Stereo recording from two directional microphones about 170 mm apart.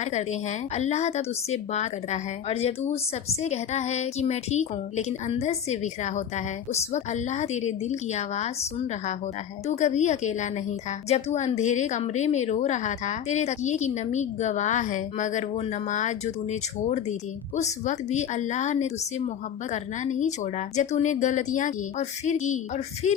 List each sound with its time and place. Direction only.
0.0 s speech: 40° left (ahead or behind)
9.6 s a woman's voice: 45° left (ahead or behind)